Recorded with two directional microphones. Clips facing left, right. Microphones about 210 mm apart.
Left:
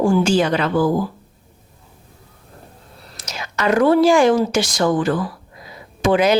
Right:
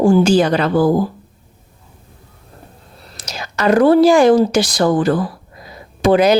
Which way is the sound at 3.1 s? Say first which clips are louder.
Right 2 dB; 35° right (ahead or behind).